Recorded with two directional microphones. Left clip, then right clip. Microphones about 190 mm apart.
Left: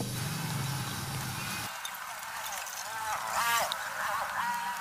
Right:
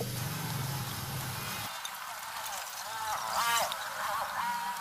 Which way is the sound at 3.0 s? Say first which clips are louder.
Even; centre (ahead or behind).